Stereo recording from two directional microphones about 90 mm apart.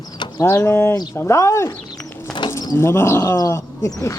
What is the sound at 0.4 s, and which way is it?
Speech, 25° left (ahead or behind).